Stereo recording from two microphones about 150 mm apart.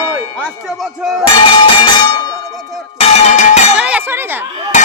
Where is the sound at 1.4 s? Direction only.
35° left (ahead or behind).